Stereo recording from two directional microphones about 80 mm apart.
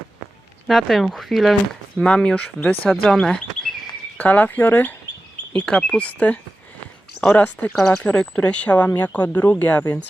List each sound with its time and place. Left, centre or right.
0.7 s speech: centre
4.2 s speech: centre
5.5 s speech: centre
7.8 s speech: centre; by 9.8 s left